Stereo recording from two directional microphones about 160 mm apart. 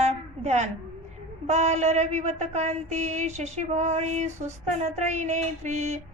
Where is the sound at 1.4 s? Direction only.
45° right (ahead or behind).